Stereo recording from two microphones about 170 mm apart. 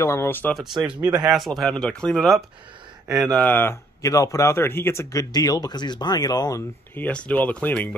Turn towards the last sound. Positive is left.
turn(degrees=10)  # may be behind; listen again after turning